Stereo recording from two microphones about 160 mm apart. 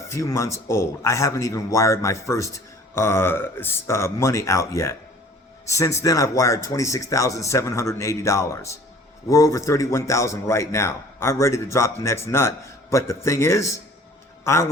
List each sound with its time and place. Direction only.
0.1 s a man's voice: 20° left (ahead or behind)